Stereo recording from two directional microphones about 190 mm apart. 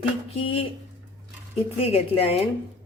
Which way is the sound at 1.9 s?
30° left (ahead or behind).